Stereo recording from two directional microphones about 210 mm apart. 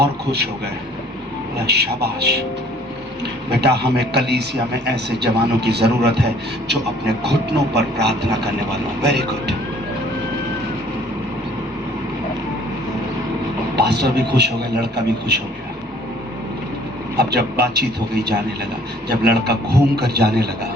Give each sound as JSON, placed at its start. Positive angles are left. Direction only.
{"t": 1.6, "sound": "a man's voice", "side_deg": -50}
{"t": 3.6, "sound": "a man's voice", "side_deg": -50}
{"t": 13.7, "sound": "a man's voice", "side_deg": -50}
{"t": 17.2, "sound": "a man's voice", "side_deg": -50}